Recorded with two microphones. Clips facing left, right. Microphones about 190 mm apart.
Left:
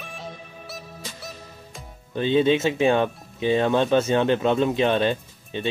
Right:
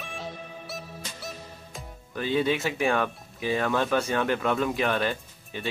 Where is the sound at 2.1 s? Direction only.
25° left (ahead or behind).